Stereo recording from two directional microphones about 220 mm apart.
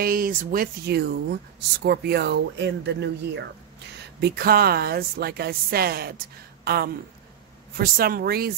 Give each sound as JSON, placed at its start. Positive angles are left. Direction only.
{"t": 0.0, "sound": "speech", "side_deg": -40}